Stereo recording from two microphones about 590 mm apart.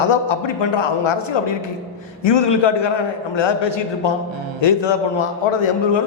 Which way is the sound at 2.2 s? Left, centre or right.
Left.